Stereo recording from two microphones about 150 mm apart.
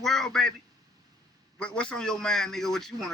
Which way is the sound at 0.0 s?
Centre (ahead or behind).